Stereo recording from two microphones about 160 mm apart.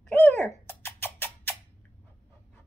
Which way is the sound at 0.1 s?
15° left (ahead or behind).